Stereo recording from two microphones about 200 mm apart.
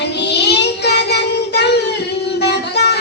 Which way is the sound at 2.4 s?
55° left (ahead or behind).